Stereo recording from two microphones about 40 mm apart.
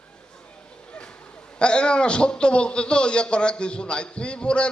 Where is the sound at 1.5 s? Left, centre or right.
Left.